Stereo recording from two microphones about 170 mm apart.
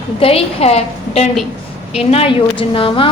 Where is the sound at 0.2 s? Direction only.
35° left (ahead or behind).